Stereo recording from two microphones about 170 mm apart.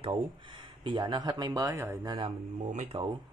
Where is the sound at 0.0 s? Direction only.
30° right (ahead or behind).